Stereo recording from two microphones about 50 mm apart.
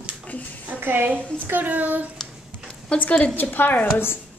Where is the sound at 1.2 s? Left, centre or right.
Left.